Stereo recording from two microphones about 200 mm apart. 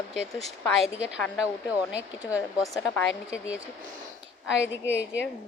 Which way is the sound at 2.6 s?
15° left (ahead or behind).